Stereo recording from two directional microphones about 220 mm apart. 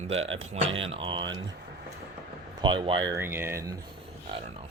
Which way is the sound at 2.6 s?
20° right (ahead or behind).